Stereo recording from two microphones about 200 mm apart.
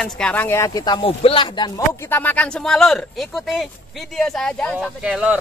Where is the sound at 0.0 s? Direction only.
5° left (ahead or behind); by 1.7 s 25° left (ahead or behind).